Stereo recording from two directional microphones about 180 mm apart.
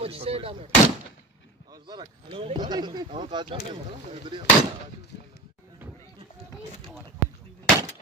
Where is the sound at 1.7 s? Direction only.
25° right (ahead or behind).